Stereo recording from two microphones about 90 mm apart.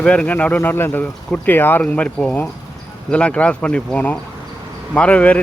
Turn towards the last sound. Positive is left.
turn(degrees=15)  # may be behind; listen again after turning